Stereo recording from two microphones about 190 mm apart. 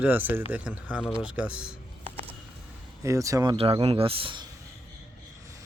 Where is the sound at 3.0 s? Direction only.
15° right (ahead or behind).